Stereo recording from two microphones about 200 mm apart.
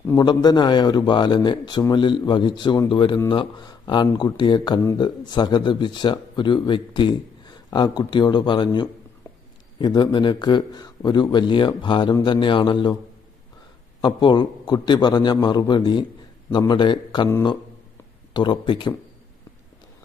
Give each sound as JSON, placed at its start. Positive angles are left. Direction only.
{"t": 0.0, "sound": "speech", "side_deg": 15}
{"t": 14.0, "sound": "speech", "side_deg": 20}